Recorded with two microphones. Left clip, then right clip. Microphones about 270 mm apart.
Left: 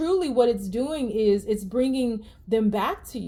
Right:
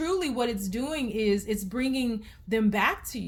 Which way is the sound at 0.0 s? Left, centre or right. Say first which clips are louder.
Left 7 dB; right.